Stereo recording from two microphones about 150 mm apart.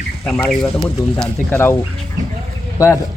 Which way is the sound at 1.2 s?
15° left (ahead or behind).